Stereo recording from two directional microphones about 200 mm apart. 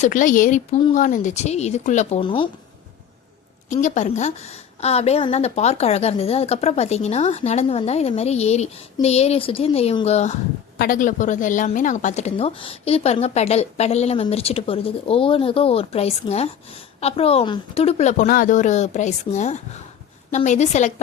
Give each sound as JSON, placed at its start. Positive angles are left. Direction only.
{"t": 0.0, "sound": "a woman's voice", "side_deg": 40}
{"t": 3.7, "sound": "a woman's voice", "side_deg": 40}
{"t": 10.8, "sound": "a woman's voice", "side_deg": 45}